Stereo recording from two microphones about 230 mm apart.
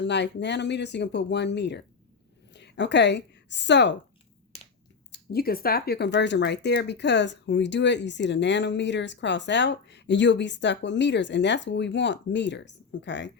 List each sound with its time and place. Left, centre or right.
0.0 s a woman's voice: left
5.1 s speech: left